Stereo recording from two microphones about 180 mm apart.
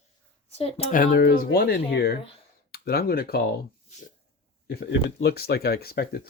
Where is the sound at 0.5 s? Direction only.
35° left (ahead or behind).